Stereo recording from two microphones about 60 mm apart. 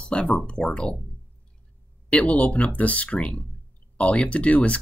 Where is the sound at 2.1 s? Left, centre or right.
Left.